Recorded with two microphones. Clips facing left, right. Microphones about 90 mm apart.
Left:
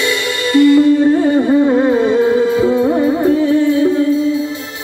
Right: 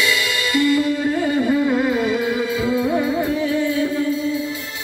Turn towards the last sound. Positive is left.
turn(degrees=25)  # may be behind; listen again after turning